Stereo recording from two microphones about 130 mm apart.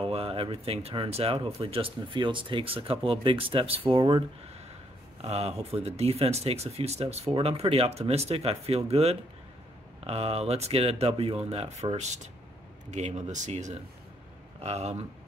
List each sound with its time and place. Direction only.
0.0 s speech: 50° right (ahead or behind)
5.2 s speech: 55° right (ahead or behind)
14.6 s speech: 55° right (ahead or behind)